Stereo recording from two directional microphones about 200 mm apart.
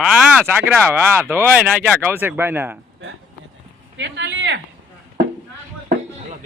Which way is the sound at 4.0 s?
60° right (ahead or behind).